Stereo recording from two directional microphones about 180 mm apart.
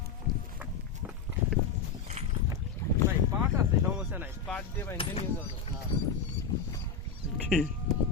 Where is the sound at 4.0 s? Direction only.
10° right (ahead or behind).